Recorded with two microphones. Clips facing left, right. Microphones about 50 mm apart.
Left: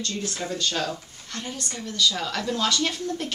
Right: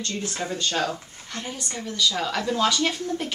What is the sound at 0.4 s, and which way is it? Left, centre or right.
Speech, centre.